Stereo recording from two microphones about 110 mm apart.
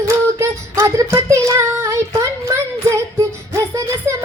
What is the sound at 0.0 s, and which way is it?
Child singing, 25° right (ahead or behind).